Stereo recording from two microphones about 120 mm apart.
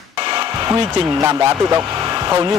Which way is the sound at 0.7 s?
25° right (ahead or behind).